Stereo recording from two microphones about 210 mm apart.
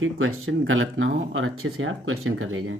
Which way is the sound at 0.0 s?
75° right (ahead or behind).